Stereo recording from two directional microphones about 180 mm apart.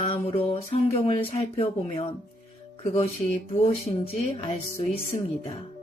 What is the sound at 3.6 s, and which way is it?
Speech, 30° left (ahead or behind).